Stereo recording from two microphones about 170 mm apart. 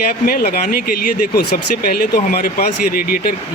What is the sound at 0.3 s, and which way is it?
Speech, 60° left (ahead or behind).